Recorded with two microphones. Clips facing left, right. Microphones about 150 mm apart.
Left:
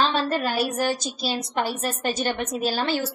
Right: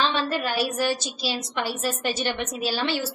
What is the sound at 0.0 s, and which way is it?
A woman's voice, 45° left (ahead or behind).